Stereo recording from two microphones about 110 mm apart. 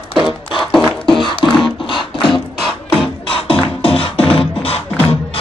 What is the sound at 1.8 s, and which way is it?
Music, 50° left (ahead or behind).